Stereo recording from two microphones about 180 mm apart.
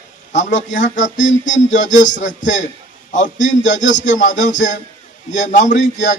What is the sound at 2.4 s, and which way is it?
Music, 45° left (ahead or behind).